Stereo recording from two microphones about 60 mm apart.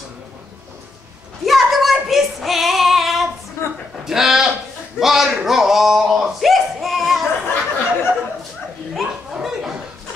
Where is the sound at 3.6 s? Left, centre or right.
Left.